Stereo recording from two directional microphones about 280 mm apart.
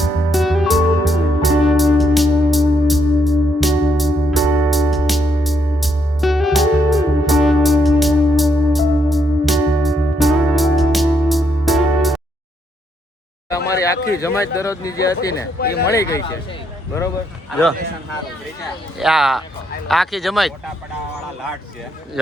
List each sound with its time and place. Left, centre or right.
0.0 s music: centre
13.7 s a sound: centre
14.2 s speech: centre
15.6 s speech: left
15.9 s speech: centre
18.9 s speech: centre